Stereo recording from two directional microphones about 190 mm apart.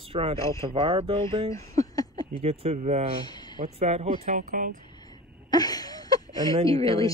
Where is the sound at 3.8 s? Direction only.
35° right (ahead or behind).